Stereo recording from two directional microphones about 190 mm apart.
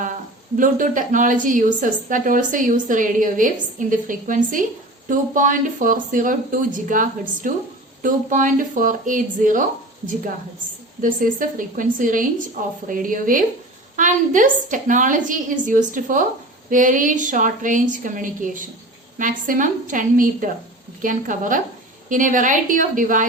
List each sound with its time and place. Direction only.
0.5 s a woman's voice: 45° right (ahead or behind)
11.0 s a woman's voice: 45° right (ahead or behind)